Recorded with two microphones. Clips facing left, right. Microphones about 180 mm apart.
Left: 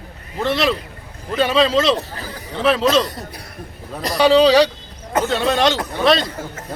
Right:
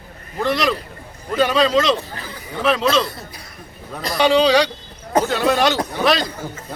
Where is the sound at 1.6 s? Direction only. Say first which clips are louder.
Even; 30° left (ahead or behind).